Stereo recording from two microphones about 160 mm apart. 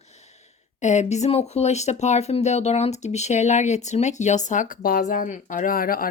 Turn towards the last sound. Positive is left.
turn(degrees=65)  # may be behind; listen again after turning